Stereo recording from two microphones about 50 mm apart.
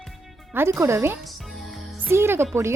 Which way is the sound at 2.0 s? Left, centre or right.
Right.